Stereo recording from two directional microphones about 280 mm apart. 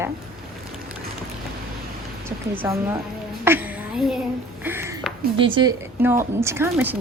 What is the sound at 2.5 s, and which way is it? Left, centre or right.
Speech, centre.